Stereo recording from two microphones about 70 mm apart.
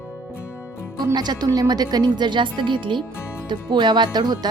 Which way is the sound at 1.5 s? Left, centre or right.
Right.